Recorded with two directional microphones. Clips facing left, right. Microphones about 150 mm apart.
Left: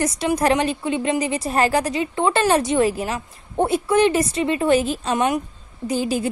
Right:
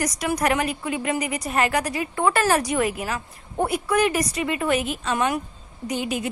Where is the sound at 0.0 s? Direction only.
25° left (ahead or behind).